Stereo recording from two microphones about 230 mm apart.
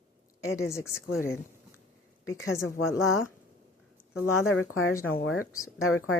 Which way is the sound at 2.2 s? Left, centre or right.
Left.